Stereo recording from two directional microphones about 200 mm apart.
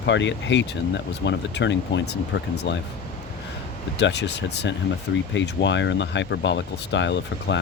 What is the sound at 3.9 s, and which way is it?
Speech, 60° left (ahead or behind).